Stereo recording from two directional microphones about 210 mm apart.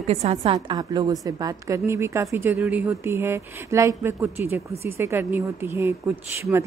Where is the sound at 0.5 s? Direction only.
20° right (ahead or behind).